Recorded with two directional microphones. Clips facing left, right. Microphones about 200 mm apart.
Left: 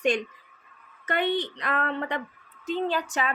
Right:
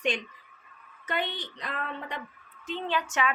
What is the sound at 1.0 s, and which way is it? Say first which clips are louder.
A woman's voice: left 7 dB; 60° left (ahead or behind).